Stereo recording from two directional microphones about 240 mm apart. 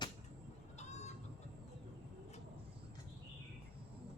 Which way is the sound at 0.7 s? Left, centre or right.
Left.